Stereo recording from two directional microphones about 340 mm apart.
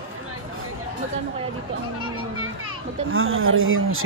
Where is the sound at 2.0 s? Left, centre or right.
Right.